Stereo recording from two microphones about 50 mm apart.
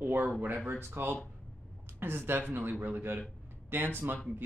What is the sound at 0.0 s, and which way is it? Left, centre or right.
Speech, right.